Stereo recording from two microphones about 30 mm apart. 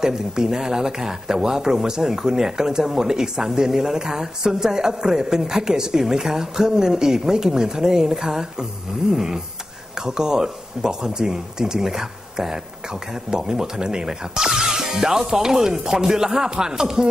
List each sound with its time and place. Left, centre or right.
0.0 s a man's voice: centre